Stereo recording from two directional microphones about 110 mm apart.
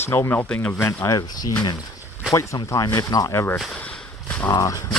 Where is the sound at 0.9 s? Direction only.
30° left (ahead or behind).